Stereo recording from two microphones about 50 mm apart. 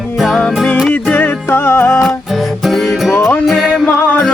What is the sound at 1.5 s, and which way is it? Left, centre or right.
Music, left.